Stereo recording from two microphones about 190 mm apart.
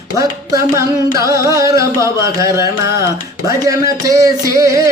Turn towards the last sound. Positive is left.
turn(degrees=-20)  # may be behind; listen again after turning